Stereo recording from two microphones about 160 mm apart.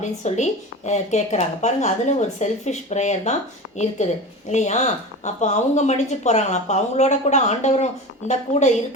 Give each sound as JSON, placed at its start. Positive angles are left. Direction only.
{"t": 0.0, "sound": "speech", "side_deg": 45}